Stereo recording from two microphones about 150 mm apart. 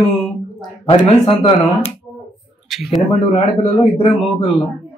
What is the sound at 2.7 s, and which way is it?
Speech, centre (ahead or behind).